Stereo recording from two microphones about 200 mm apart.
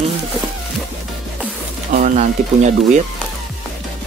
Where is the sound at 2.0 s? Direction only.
35° right (ahead or behind).